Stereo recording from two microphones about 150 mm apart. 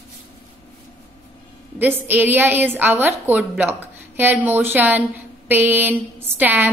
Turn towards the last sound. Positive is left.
turn(degrees=-10)  # may be behind; listen again after turning